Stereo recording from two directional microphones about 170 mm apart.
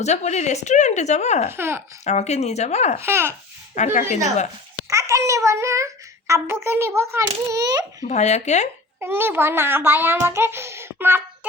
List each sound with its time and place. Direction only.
0.0 s speech: 40° left (ahead or behind)
1.5 s a child's voice: 15° right (ahead or behind)
2.0 s speech: 40° left (ahead or behind)
3.0 s a child's voice: 15° right (ahead or behind)
3.8 s speech: 45° left (ahead or behind)
4.9 s a child's voice: 20° right (ahead or behind)
8.0 s speech: 40° left (ahead or behind)
9.0 s a child's voice: 15° right (ahead or behind)